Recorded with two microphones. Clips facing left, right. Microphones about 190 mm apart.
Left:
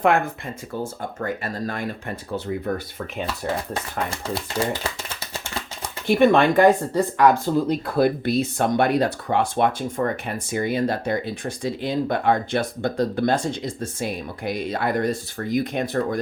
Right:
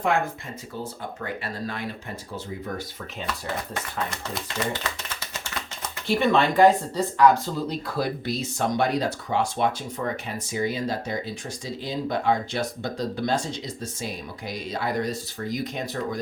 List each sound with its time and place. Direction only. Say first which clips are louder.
0.8 s speech: left 5 dB; 45° left (ahead or behind)
4.4 s typewriter: left 3 dB; 30° left (ahead or behind)
6.1 s speech: left 5 dB; 55° left (ahead or behind)